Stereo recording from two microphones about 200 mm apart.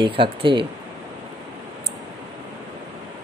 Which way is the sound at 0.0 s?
25° right (ahead or behind).